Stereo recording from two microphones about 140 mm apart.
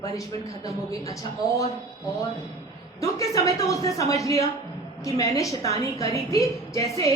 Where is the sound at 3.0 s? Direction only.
20° left (ahead or behind).